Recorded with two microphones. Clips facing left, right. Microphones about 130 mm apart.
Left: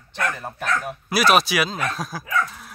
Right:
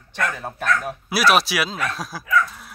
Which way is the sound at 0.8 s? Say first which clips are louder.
Even; 5° right (ahead or behind).